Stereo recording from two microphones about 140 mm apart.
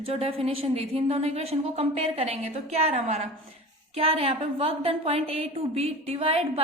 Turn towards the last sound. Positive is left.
turn(degrees=-40)  # may be behind; listen again after turning